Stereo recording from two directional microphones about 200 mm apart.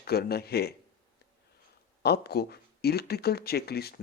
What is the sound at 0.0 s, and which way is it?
Speech, 50° left (ahead or behind).